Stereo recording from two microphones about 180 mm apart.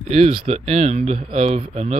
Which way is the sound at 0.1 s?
35° right (ahead or behind).